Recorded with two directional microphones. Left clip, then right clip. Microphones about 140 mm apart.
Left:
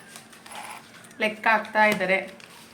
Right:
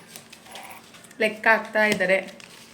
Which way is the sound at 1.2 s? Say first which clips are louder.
Right 2 dB; 20° left (ahead or behind).